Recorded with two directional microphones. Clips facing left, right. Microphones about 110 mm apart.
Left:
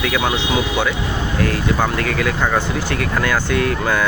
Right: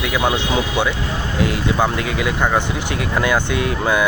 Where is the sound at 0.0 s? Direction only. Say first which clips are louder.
Even; 15° right (ahead or behind).